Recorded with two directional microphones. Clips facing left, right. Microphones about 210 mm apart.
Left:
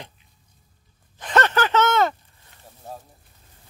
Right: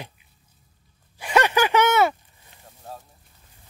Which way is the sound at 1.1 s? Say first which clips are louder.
Right 1 dB; 10° right (ahead or behind).